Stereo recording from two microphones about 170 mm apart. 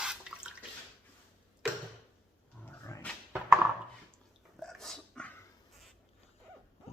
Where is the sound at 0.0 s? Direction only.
5° right (ahead or behind).